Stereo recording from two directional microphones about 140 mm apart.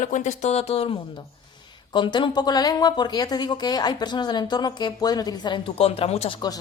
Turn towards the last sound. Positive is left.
turn(degrees=50)  # may be behind; listen again after turning